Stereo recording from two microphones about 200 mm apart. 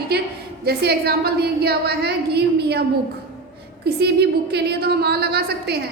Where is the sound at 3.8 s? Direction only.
55° right (ahead or behind).